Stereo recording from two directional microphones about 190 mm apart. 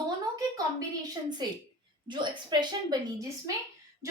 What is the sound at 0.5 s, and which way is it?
Speech, 20° right (ahead or behind).